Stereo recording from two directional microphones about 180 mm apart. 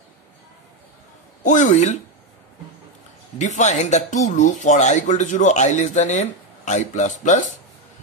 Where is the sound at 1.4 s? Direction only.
45° left (ahead or behind).